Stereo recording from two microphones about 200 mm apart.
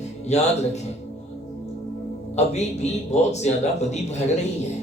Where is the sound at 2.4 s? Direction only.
35° left (ahead or behind).